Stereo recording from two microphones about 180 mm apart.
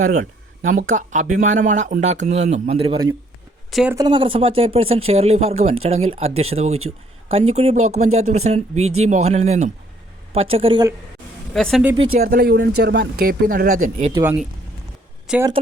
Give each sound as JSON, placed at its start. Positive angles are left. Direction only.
{"t": 0.0, "sound": "speech", "side_deg": -45}
{"t": 3.7, "sound": "speech", "side_deg": 0}
{"t": 3.9, "sound": "speech", "side_deg": -25}
{"t": 11.5, "sound": "speech", "side_deg": 5}
{"t": 12.1, "sound": "speech", "side_deg": -60}
{"t": 15.3, "sound": "speech", "side_deg": -5}